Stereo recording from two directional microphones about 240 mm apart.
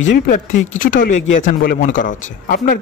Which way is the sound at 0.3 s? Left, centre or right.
Left.